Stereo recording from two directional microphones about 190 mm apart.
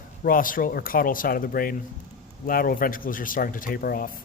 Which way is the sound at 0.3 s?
45° left (ahead or behind).